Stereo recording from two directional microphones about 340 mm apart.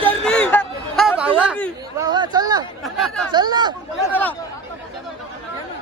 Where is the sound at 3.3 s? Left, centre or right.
Centre.